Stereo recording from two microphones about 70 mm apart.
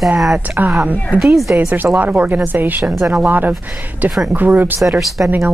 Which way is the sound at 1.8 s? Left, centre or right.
Right.